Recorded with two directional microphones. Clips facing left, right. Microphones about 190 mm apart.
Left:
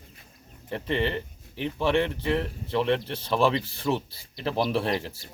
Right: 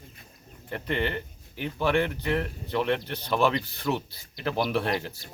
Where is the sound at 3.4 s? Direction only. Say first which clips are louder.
Left 1 dB; 30° left (ahead or behind).